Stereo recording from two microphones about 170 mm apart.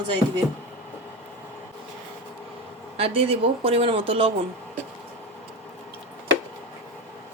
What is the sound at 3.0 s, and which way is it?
Speech, 35° right (ahead or behind).